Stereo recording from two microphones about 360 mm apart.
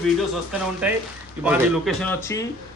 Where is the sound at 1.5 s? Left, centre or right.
Centre.